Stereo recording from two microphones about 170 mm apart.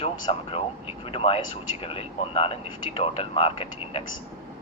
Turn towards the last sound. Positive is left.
turn(degrees=30)  # may be behind; listen again after turning